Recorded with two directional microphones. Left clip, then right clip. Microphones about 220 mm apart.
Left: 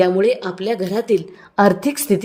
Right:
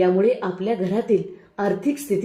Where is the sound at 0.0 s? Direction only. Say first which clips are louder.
Left 3 dB; 45° left (ahead or behind).